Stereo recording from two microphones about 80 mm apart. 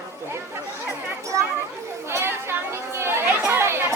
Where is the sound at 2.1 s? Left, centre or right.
Right.